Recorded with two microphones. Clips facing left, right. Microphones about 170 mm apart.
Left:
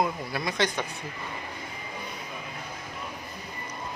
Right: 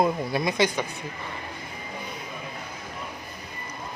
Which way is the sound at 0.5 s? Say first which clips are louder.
Right 1 dB; 10° right (ahead or behind).